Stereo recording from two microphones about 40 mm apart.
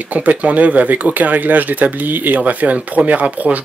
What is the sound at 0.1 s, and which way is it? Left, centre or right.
Speech, right.